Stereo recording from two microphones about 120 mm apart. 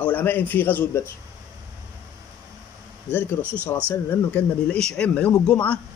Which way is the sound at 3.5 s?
10° left (ahead or behind).